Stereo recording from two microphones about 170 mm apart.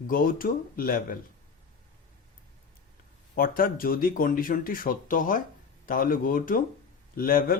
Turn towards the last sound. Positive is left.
turn(degrees=55)  # may be behind; listen again after turning